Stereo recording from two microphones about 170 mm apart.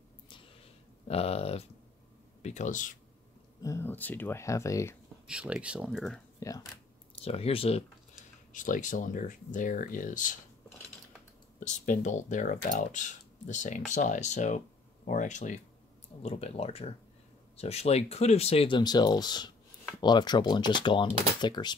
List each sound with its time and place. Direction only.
1.0 s speech: 35° left (ahead or behind)
3.6 s speech: 15° left (ahead or behind)
5.2 s speech: 5° right (ahead or behind)
7.2 s speech: 35° left (ahead or behind)
8.5 s speech: 50° left (ahead or behind)
11.6 s speech: 50° left (ahead or behind); by 21.7 s 25° left (ahead or behind)